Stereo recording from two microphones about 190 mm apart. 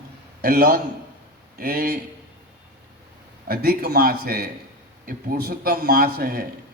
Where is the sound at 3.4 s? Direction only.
50° right (ahead or behind).